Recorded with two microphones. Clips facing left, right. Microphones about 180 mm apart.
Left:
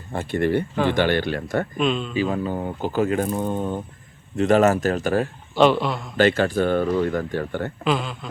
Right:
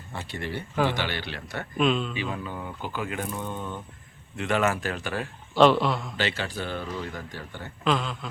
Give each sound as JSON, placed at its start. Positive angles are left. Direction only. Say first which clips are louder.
{"t": 0.1, "sound": "speech", "louder": "left 12 dB", "side_deg": 50}
{"t": 1.8, "sound": "a man's voice", "louder": "right 2 dB", "side_deg": 0}
{"t": 2.1, "sound": "speech", "louder": "left 9 dB", "side_deg": 40}
{"t": 5.5, "sound": "a man's voice", "louder": "left 2 dB", "side_deg": 0}
{"t": 6.1, "sound": "speech", "louder": "left 12 dB", "side_deg": 50}
{"t": 7.9, "sound": "a man's voice", "louder": "left 1 dB", "side_deg": 5}